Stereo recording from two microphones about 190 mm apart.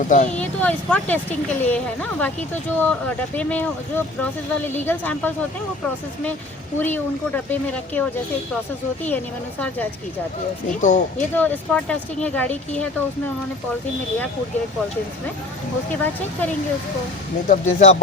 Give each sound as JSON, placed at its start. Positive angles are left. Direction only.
{"t": 0.1, "sound": "speech", "side_deg": 40}
{"t": 0.3, "sound": "speech", "side_deg": 5}
{"t": 6.7, "sound": "speech", "side_deg": 10}
{"t": 9.0, "sound": "speech", "side_deg": 10}
{"t": 10.7, "sound": "speech", "side_deg": 40}
{"t": 11.3, "sound": "speech", "side_deg": 10}
{"t": 17.5, "sound": "speech", "side_deg": 40}